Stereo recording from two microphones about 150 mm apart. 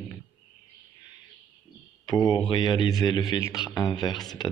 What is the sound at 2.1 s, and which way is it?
Speech, 30° left (ahead or behind).